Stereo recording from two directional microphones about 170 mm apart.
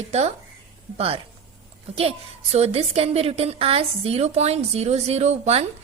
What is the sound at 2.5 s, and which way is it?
A woman's voice, 40° right (ahead or behind).